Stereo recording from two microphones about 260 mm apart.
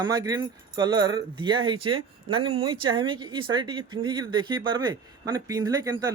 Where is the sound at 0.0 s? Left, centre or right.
Centre.